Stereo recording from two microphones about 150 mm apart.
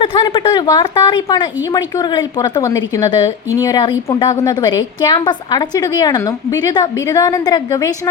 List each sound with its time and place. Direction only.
0.0 s a woman's voice: 35° left (ahead or behind)